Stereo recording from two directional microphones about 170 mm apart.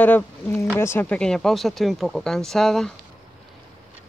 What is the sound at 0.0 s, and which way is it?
Speech, 10° left (ahead or behind).